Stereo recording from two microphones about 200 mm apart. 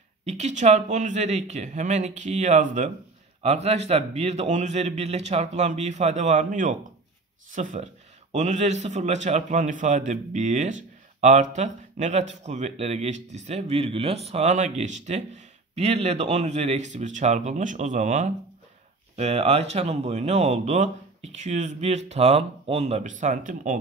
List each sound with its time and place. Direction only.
0.2 s a man's voice: 35° right (ahead or behind)